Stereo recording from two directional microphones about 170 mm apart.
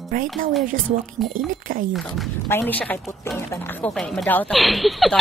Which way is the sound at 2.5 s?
10° left (ahead or behind).